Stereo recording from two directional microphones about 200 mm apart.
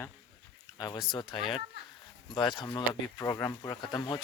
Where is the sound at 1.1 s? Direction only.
20° left (ahead or behind).